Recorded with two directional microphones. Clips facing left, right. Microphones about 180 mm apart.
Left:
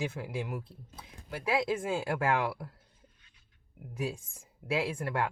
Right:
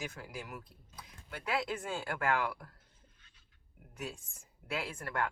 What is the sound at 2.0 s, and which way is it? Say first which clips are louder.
Speech: left 2 dB; 30° left (ahead or behind).